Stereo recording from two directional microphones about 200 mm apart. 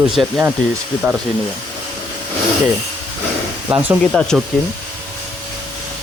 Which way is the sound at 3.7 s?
15° right (ahead or behind).